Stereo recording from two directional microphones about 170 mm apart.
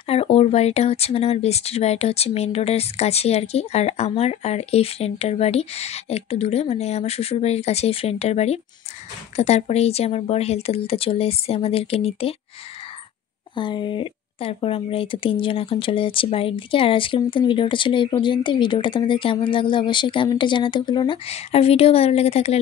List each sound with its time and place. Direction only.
0.1 s speech: 35° left (ahead or behind)
13.6 s a woman's voice: 25° left (ahead or behind)